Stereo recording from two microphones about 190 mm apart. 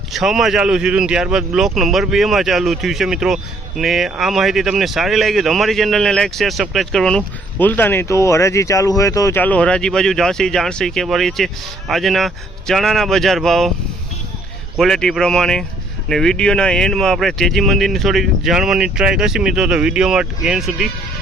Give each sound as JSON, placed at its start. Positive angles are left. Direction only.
{"t": 0.1, "sound": "speech", "side_deg": 0}
{"t": 14.8, "sound": "speech", "side_deg": 5}